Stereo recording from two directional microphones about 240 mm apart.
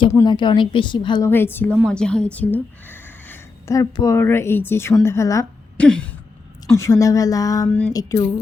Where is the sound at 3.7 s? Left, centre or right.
Centre.